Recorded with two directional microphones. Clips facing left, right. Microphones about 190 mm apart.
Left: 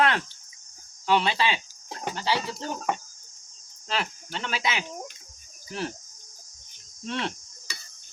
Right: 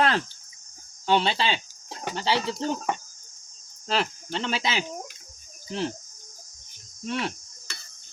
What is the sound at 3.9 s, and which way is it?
Speech, 30° right (ahead or behind).